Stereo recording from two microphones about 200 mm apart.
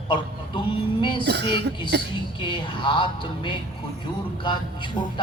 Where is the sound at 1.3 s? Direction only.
55° right (ahead or behind).